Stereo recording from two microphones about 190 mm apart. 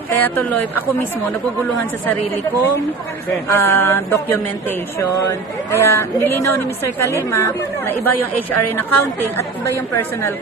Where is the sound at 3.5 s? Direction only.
10° left (ahead or behind).